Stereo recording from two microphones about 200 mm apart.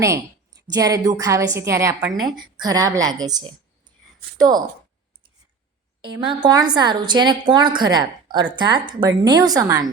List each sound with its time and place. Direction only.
0.7 s a woman's voice: 15° right (ahead or behind)
6.1 s a woman's voice: 25° right (ahead or behind)